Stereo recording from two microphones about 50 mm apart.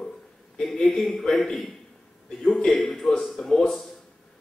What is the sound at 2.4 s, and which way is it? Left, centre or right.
Speech, left.